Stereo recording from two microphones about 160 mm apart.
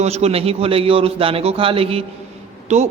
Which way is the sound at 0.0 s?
40° right (ahead or behind).